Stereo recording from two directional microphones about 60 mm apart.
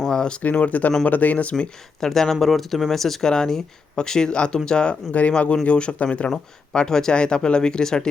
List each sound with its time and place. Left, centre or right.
0.0 s speech: centre
0.4 s speech: left
1.5 s speech: centre
6.3 s speech: centre